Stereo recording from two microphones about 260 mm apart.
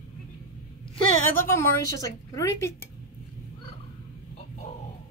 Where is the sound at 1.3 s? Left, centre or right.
Centre.